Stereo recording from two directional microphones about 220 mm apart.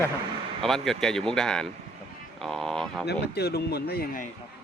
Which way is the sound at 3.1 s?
50° left (ahead or behind).